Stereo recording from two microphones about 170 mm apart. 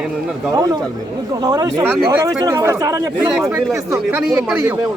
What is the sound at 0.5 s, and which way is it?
Speech, 20° right (ahead or behind).